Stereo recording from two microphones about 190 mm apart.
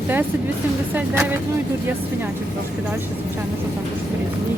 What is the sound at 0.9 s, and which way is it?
Speech, 10° right (ahead or behind).